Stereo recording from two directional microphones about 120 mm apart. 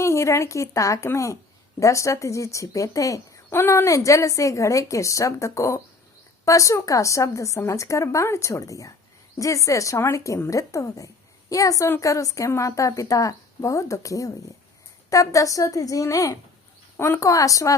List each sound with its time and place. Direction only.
0.0 s speech: 25° left (ahead or behind)